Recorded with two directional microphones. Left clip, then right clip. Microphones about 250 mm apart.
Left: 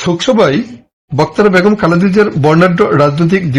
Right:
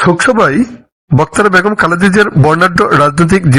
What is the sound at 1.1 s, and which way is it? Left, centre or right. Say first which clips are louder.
Speech: right 1 dB; right.